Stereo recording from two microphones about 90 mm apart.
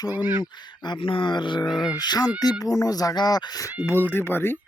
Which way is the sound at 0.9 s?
70° left (ahead or behind).